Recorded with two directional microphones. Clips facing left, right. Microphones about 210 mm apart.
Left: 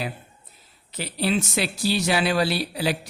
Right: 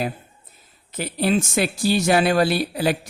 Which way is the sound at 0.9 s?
50° right (ahead or behind).